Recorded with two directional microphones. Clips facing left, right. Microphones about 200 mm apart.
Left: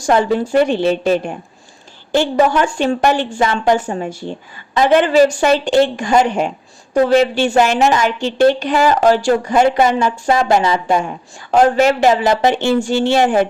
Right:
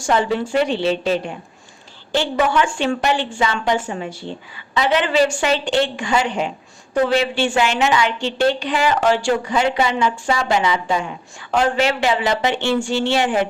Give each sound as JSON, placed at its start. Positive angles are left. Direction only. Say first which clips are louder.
{"t": 0.0, "sound": "a woman's voice", "louder": "left 4 dB", "side_deg": 45}